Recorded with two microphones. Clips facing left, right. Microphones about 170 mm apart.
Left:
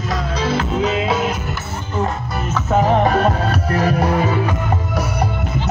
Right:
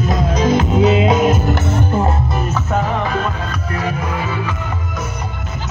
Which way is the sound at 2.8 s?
40° left (ahead or behind).